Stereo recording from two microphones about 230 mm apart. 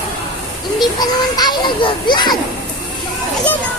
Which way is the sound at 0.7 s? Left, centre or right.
Centre.